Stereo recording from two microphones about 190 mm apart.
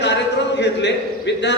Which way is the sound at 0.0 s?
65° left (ahead or behind).